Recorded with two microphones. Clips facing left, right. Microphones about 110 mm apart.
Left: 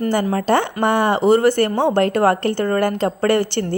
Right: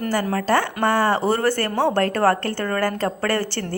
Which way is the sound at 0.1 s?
20° left (ahead or behind).